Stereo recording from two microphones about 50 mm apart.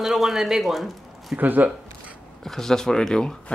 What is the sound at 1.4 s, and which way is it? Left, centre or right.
Speech, right.